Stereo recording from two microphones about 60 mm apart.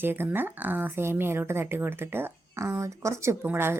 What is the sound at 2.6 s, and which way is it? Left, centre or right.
Speech, right.